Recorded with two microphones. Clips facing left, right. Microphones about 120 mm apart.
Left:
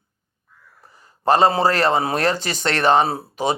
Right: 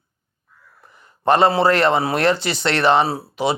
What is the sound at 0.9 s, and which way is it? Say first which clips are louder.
Speech: right 1 dB; 35° left (ahead or behind).